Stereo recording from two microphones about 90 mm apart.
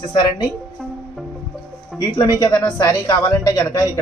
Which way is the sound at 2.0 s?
50° left (ahead or behind).